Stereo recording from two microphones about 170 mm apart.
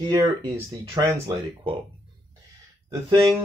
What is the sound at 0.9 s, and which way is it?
Speech, 25° right (ahead or behind).